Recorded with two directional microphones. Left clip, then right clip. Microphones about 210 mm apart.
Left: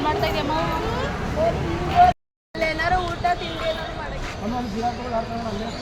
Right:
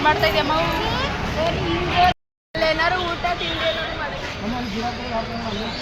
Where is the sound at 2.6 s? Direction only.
40° right (ahead or behind).